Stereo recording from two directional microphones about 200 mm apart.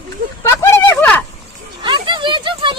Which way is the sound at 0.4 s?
15° left (ahead or behind).